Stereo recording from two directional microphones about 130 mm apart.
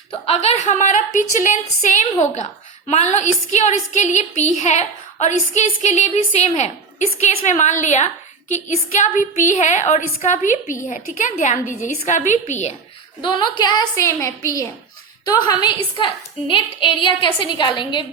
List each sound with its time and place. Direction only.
0.1 s a woman's voice: 50° left (ahead or behind)
0.6 s a woman's voice: 65° left (ahead or behind)
2.3 s a woman's voice: 60° left (ahead or behind)
13.2 s a woman's voice: 40° left (ahead or behind)
14.0 s a woman's voice: 20° left (ahead or behind)
16.5 s a woman's voice: 40° left (ahead or behind)